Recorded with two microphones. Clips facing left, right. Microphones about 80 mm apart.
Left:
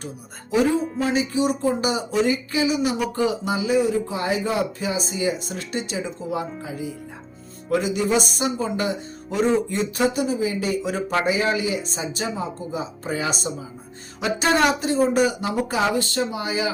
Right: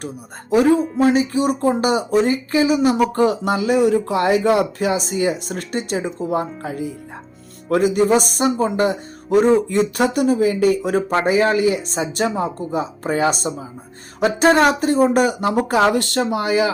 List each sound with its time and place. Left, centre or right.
0.5 s speech: right